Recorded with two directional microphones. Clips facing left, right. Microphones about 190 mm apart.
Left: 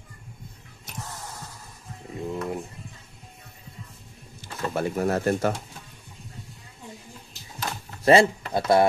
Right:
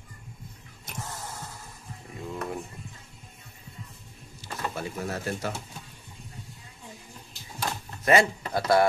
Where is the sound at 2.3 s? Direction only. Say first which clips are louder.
Left 3 dB; 20° left (ahead or behind).